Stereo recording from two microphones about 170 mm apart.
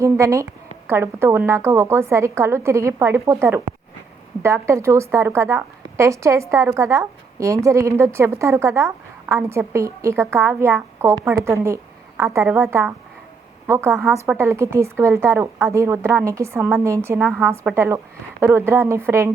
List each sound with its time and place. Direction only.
0.0 s speech: 15° right (ahead or behind)